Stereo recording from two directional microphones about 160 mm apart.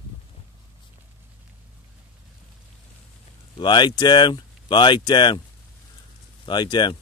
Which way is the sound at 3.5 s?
30° left (ahead or behind).